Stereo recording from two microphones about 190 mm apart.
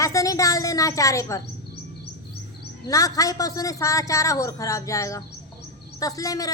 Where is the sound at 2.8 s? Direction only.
20° left (ahead or behind).